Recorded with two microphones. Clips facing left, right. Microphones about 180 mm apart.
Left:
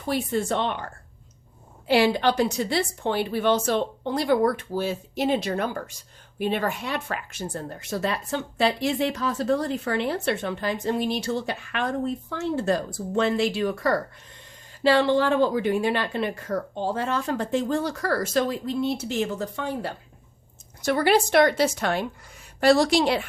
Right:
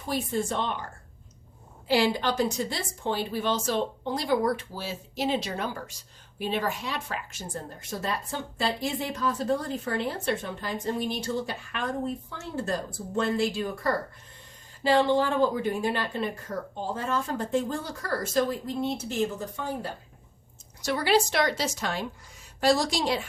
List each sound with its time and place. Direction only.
0.1 s speech: 70° left (ahead or behind)
1.9 s a woman's voice: 65° left (ahead or behind)
20.8 s a woman's voice: 55° left (ahead or behind)